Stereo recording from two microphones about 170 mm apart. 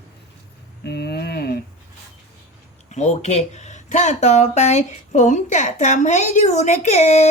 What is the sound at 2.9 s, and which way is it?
Speech, 45° left (ahead or behind).